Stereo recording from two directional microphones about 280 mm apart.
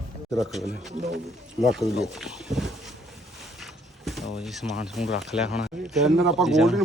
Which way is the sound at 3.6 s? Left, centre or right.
Centre.